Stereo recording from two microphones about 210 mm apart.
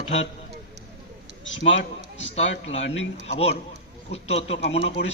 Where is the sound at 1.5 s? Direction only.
60° left (ahead or behind).